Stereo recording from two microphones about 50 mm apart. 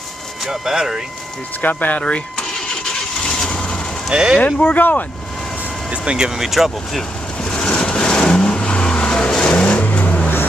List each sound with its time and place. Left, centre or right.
0.5 s speech: centre
1.6 s speech: left
3.3 s vehicle: centre
4.1 s speech: centre
4.4 s speech: left
5.9 s speech: centre
6.4 s speech: centre
7.4 s vehicle: centre